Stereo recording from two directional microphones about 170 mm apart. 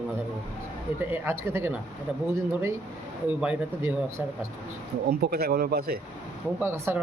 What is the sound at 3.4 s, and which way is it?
Speech, 10° right (ahead or behind).